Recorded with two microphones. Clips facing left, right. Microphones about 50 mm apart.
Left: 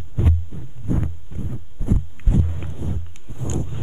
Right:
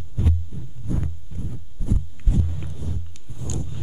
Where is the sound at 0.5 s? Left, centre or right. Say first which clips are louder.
Left 4 dB; left.